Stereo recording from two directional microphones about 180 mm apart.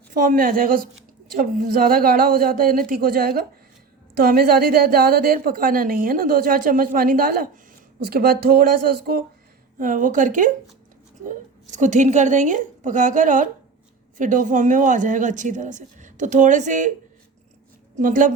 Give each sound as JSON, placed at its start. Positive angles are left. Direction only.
{"t": 0.1, "sound": "a woman's voice", "side_deg": -50}
{"t": 18.0, "sound": "a woman's voice", "side_deg": -45}